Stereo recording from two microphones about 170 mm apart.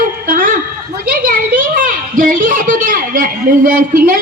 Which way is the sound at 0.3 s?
55° right (ahead or behind).